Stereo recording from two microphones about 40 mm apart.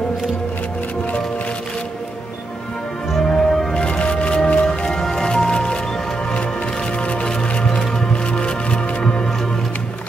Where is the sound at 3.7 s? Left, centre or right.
Left.